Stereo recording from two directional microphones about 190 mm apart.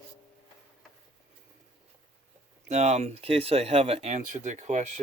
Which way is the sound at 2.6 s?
35° right (ahead or behind).